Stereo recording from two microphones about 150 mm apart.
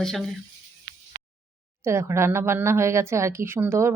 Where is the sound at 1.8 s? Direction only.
20° right (ahead or behind).